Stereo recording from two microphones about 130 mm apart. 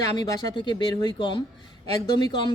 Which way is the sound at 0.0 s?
35° left (ahead or behind).